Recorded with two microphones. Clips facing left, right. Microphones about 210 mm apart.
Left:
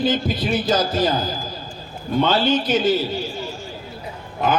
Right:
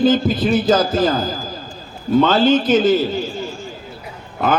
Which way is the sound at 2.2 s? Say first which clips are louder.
Right 4 dB; 50° right (ahead or behind).